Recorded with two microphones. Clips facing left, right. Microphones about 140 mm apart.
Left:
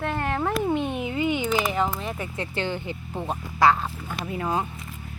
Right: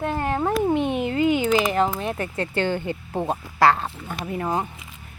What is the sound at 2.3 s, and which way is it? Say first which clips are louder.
Speech: right 5 dB; 45° right (ahead or behind).